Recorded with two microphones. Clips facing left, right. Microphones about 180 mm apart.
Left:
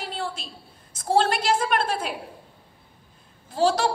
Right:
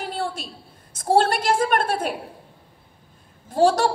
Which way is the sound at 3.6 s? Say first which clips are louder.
Right 4 dB; 50° right (ahead or behind).